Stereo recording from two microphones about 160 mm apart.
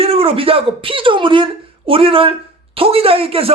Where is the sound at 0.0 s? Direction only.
35° right (ahead or behind).